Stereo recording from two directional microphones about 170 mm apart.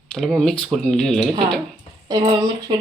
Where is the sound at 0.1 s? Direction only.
5° left (ahead or behind).